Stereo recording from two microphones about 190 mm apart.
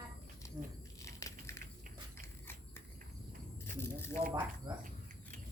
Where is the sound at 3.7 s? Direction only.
10° left (ahead or behind).